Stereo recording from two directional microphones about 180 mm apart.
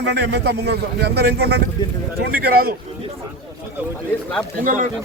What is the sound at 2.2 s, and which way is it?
Speech, 55° right (ahead or behind).